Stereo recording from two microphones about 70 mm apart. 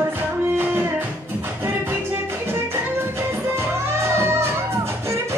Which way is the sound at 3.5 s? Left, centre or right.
Right.